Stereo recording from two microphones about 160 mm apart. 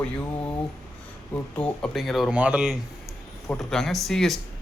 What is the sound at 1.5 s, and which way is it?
Speech, 5° left (ahead or behind).